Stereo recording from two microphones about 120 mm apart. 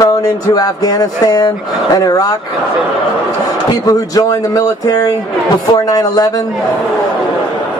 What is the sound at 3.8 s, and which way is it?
Speech, 30° left (ahead or behind).